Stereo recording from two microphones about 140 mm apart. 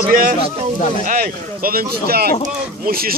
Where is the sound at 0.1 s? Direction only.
85° right.